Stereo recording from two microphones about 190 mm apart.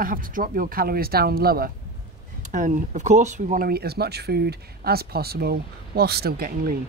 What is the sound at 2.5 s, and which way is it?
Speech, 40° right (ahead or behind).